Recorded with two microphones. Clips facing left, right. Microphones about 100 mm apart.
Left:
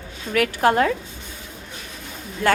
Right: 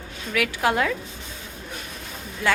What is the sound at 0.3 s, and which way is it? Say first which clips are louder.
Speech: left 4 dB; 40° left (ahead or behind).